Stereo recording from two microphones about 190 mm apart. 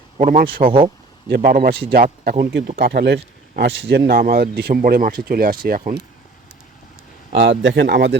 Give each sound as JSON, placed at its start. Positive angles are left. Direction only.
{"t": 0.2, "sound": "speech", "side_deg": -45}
{"t": 7.6, "sound": "speech", "side_deg": -65}